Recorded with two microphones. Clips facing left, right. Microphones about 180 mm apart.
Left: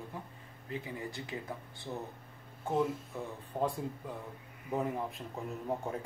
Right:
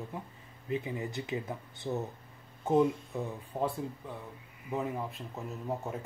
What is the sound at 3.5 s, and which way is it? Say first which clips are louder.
Speech: even; 10° right (ahead or behind).